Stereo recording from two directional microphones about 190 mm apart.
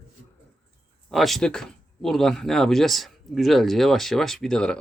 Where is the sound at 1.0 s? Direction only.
Centre (ahead or behind).